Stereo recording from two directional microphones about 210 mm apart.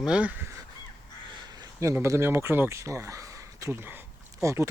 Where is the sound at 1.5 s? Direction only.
15° right (ahead or behind).